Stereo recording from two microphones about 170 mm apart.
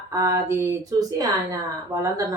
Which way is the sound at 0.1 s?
20° right (ahead or behind).